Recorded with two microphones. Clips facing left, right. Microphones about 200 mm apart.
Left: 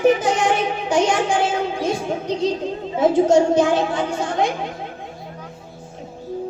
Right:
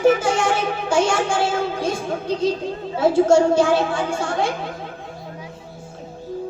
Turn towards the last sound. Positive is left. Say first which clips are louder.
# left 1 dB
turn(degrees=20)  # may be behind; listen again after turning